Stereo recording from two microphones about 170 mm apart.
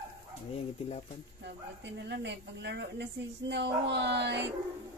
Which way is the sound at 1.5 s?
90° right.